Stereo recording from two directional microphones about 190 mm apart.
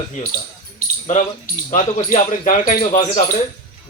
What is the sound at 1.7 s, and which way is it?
Speech, 40° left (ahead or behind).